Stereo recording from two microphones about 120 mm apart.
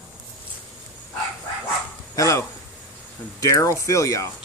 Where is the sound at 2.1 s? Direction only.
25° left (ahead or behind).